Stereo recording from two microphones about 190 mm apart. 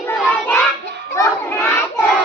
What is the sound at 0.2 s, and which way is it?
Child singing, 10° left (ahead or behind).